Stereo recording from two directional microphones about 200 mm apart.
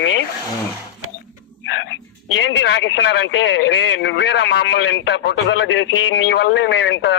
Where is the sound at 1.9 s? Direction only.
70° left (ahead or behind).